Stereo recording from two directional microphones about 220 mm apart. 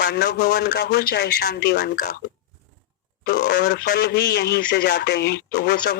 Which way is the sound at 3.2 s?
45° left (ahead or behind).